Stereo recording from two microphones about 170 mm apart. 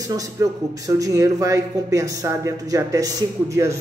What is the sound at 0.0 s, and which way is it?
A man's voice, 20° right (ahead or behind).